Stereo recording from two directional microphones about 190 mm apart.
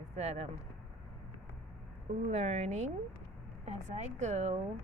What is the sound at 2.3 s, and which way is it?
A woman's voice, 35° right (ahead or behind).